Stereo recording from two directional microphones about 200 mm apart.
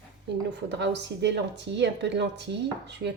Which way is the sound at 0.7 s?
60° right (ahead or behind).